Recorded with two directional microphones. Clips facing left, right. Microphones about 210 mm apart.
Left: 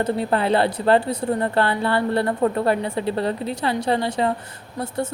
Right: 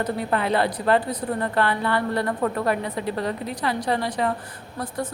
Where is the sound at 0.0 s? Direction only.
30° left (ahead or behind).